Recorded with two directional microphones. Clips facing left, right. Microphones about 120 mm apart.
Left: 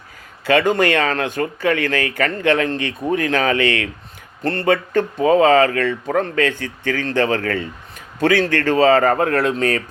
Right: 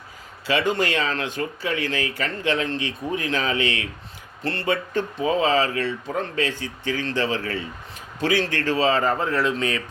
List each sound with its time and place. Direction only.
0.4 s speech: 50° left (ahead or behind)
4.4 s speech: 45° left (ahead or behind)
4.7 s speech: 60° left (ahead or behind)